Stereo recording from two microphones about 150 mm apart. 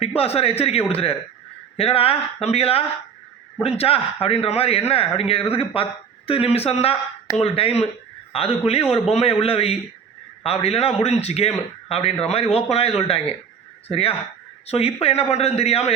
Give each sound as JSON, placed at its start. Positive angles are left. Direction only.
{"t": 0.0, "sound": "a man's voice", "side_deg": 40}